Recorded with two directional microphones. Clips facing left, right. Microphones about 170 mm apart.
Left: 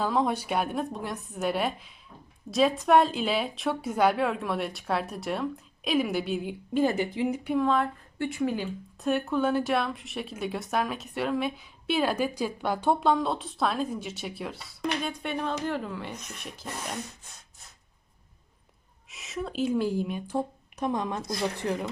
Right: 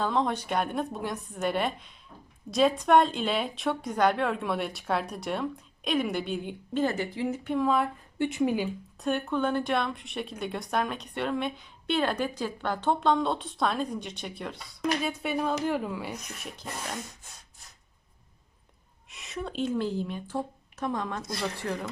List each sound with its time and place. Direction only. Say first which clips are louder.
0.0 s a woman's voice: left 1 dB; 5° left (ahead or behind)
8.2 s speech: right 2 dB; 20° right (ahead or behind)
9.0 s a woman's voice: left 2 dB; centre (ahead or behind)
19.0 s a woman's voice: left 2 dB; centre (ahead or behind)